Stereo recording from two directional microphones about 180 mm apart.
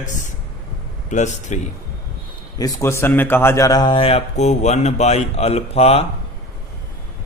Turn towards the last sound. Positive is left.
turn(degrees=35)  # may be behind; listen again after turning